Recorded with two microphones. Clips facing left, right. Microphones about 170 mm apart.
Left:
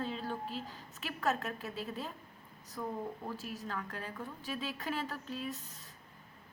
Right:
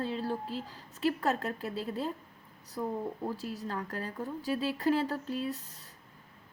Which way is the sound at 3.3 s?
35° right (ahead or behind).